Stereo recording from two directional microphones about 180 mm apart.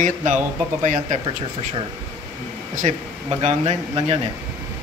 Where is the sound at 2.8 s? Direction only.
35° right (ahead or behind).